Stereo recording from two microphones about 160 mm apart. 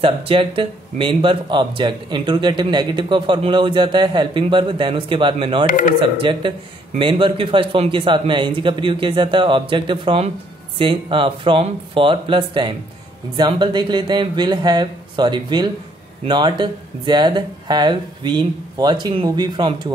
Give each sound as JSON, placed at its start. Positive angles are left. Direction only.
{"t": 0.0, "sound": "speech", "side_deg": -35}
{"t": 5.7, "sound": "speech", "side_deg": 55}
{"t": 5.9, "sound": "speech", "side_deg": -30}